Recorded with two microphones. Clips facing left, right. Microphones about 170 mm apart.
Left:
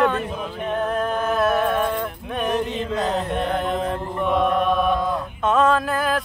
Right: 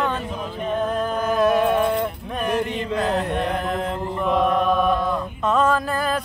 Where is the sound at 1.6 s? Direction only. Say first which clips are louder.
Right 2 dB; 10° right (ahead or behind).